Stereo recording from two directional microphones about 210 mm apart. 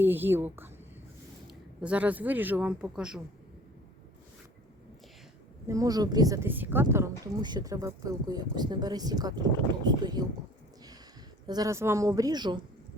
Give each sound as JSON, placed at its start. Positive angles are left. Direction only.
{"t": 0.0, "sound": "speech", "side_deg": -10}
{"t": 5.6, "sound": "speech", "side_deg": -15}
{"t": 11.4, "sound": "speech", "side_deg": -15}